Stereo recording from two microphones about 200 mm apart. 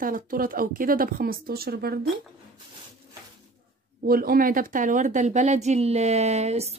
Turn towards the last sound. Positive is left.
turn(degrees=-30)  # may be behind; listen again after turning